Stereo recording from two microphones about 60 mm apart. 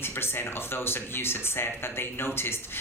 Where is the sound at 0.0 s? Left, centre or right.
Left.